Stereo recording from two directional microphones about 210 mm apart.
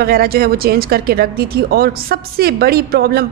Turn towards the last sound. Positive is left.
turn(degrees=-45)  # may be behind; listen again after turning